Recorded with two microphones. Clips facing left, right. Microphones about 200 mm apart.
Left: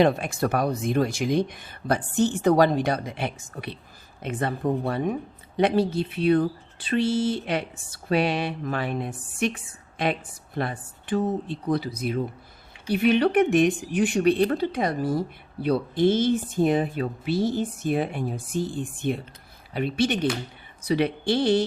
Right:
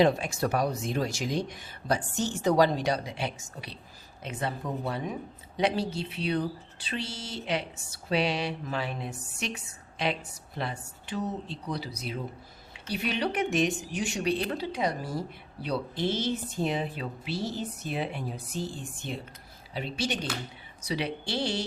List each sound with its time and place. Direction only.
0.0 s speech: 55° left (ahead or behind)